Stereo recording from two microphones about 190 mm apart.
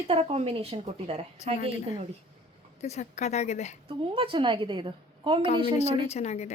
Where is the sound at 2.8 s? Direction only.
35° left (ahead or behind).